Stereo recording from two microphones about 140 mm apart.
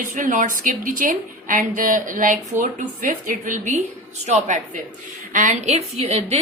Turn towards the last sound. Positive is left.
turn(degrees=-50)  # may be behind; listen again after turning